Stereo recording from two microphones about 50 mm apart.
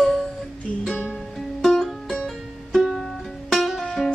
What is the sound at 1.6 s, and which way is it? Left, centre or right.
Music, centre.